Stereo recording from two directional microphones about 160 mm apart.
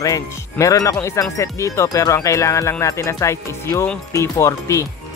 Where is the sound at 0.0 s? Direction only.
20° left (ahead or behind).